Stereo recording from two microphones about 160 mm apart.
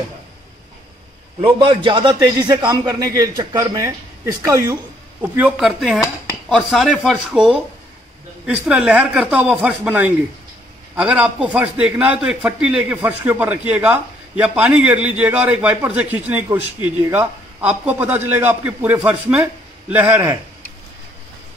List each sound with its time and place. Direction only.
1.4 s a man's voice: 35° right (ahead or behind); by 20.3 s 15° right (ahead or behind)